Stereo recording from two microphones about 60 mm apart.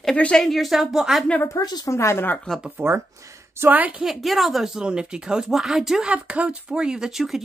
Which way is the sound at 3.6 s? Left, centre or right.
Right.